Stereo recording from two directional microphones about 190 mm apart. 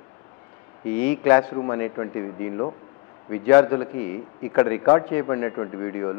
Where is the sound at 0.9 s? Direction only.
10° left (ahead or behind).